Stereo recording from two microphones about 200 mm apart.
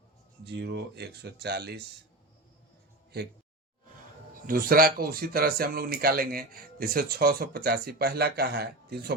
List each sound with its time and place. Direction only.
0.4 s speech: 55° right (ahead or behind)
4.4 s speech: 45° right (ahead or behind)